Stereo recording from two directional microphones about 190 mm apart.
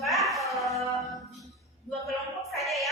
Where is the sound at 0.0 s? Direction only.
Centre (ahead or behind).